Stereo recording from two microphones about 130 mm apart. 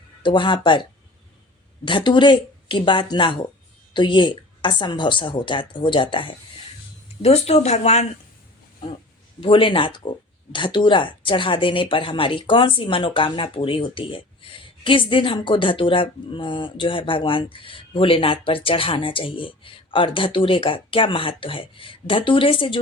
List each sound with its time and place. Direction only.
0.2 s speech: 40° left (ahead or behind)
7.2 s speech: 50° left (ahead or behind)
9.4 s speech: 40° left (ahead or behind)